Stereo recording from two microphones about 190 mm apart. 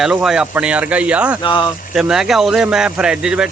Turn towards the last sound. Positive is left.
turn(degrees=-5)  # may be behind; listen again after turning